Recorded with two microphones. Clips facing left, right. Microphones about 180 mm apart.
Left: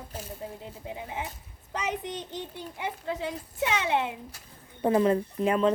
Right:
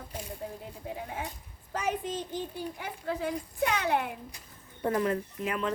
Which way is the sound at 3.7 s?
20° left (ahead or behind).